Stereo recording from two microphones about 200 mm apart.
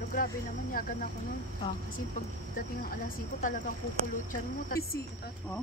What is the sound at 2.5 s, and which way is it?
A woman's voice, 45° left (ahead or behind).